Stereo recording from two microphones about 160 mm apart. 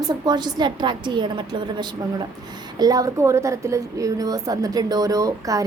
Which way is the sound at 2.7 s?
25° right (ahead or behind).